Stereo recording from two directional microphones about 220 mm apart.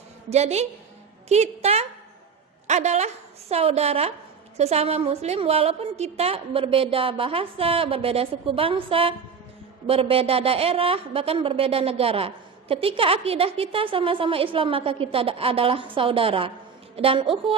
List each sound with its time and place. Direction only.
0.3 s a woman's voice: 30° right (ahead or behind)